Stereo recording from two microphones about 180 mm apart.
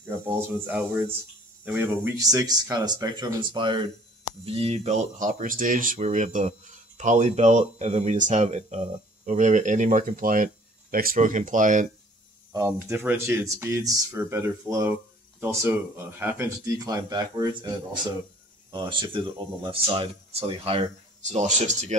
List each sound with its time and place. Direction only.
0.3 s speech: 10° right (ahead or behind); by 11.9 s 45° right (ahead or behind)
12.5 s speech: 15° right (ahead or behind); by 21.9 s 40° right (ahead or behind)